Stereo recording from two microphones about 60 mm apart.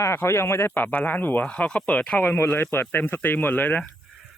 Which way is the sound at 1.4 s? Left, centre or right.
Centre.